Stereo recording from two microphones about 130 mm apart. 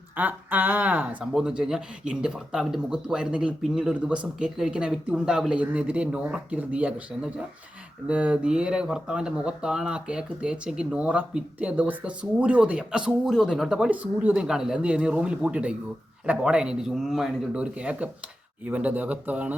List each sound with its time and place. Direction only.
0.2 s speech: 15° right (ahead or behind)